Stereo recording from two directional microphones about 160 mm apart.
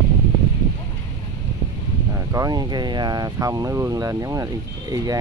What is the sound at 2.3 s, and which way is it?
Speech, 25° right (ahead or behind).